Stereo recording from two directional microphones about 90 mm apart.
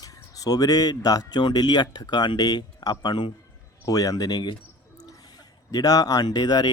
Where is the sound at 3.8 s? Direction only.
40° left (ahead or behind).